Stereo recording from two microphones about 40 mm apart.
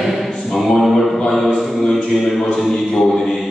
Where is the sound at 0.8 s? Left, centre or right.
Centre.